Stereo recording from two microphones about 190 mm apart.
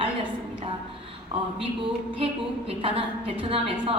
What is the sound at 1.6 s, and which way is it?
A man's voice, 30° right (ahead or behind).